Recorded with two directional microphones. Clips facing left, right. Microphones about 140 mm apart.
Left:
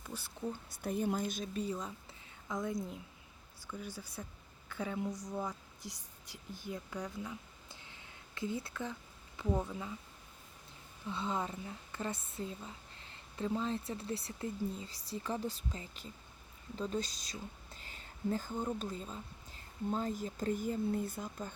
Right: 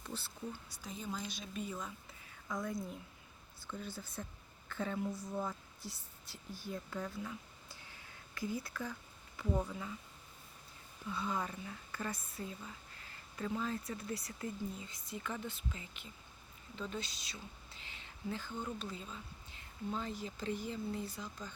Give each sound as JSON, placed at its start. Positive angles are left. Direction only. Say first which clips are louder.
{"t": 0.0, "sound": "a sound", "louder": "even", "side_deg": 10}
{"t": 0.7, "sound": "speech", "louder": "left 9 dB", "side_deg": 60}
{"t": 2.5, "sound": "speech", "louder": "left 2 dB", "side_deg": 20}
{"t": 11.1, "sound": "speech", "louder": "left 2 dB", "side_deg": 25}